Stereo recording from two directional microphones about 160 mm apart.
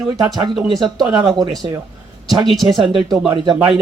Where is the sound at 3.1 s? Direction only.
30° right (ahead or behind).